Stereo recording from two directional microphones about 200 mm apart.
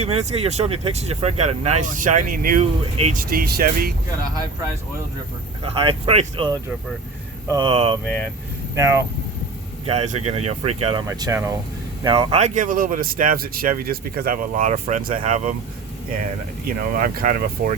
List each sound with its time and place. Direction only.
0.0 s speech: 30° right (ahead or behind); by 3.9 s 50° right (ahead or behind)
5.6 s speech: 25° right (ahead or behind)
8.7 s speech: 15° right (ahead or behind)
9.8 s speech: 30° right (ahead or behind)
11.0 s speech: 15° right (ahead or behind)
12.0 s speech: 25° right (ahead or behind)
16.6 s speech: 45° right (ahead or behind)